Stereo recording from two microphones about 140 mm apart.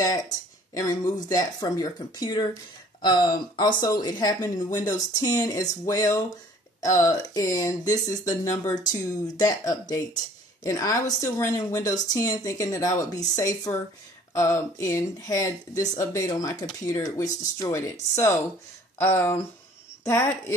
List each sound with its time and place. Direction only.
0.0 s speech: 25° left (ahead or behind)
14.3 s speech: 20° left (ahead or behind)